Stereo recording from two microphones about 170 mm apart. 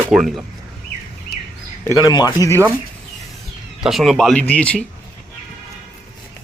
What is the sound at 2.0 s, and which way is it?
Speech, 25° left (ahead or behind).